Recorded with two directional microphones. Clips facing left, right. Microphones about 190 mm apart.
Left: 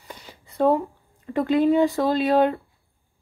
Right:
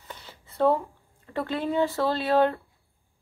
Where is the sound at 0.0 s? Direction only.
15° left (ahead or behind).